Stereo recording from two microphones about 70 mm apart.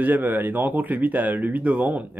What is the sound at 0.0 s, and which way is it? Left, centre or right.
Speech, right.